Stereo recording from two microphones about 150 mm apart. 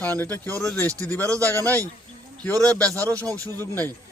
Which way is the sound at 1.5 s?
15° left (ahead or behind).